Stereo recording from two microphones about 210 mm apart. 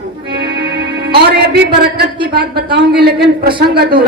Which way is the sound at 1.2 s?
50° right (ahead or behind).